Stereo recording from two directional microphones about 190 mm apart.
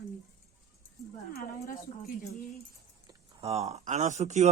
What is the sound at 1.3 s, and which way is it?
Speech, 50° left (ahead or behind).